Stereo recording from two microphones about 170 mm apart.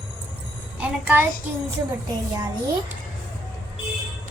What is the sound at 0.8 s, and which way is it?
Speech, 10° right (ahead or behind).